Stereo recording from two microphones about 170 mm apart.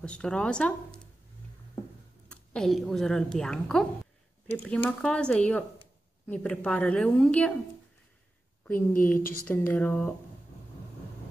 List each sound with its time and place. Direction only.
0.0 s a woman's voice: 5° left (ahead or behind)
2.2 s a woman's voice: 5° left (ahead or behind)
8.7 s a woman's voice: 55° left (ahead or behind)
9.5 s speech: 10° left (ahead or behind)